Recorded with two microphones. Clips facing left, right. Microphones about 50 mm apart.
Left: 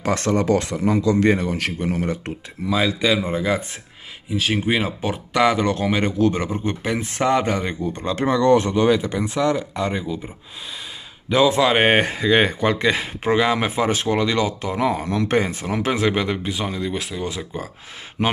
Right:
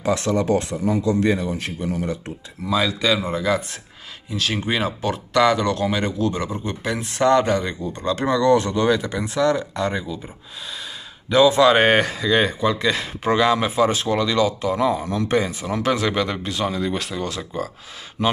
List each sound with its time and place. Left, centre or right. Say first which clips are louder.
0.0 s a man's voice: even; left
0.5 s a man's voice: left 1 dB; left
2.7 s speech: left 1 dB; left
5.6 s speech: left 1 dB; left
7.2 s speech: right 3 dB; centre
11.2 s speech: right 2 dB; left
15.0 s a man's voice: left 1 dB; left
15.4 s speech: right 1 dB; left
16.6 s speech: right 2 dB; centre
17.2 s speech: right 1 dB; centre